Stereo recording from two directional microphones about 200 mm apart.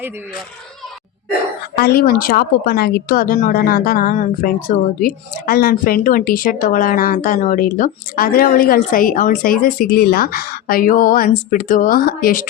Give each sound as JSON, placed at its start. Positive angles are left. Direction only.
{"t": 1.7, "sound": "a woman's voice", "side_deg": 50}